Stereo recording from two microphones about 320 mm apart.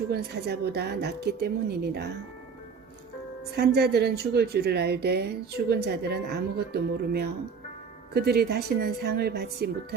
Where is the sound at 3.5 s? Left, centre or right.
Right.